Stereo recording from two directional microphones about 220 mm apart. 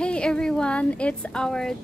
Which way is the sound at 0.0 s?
5° left (ahead or behind).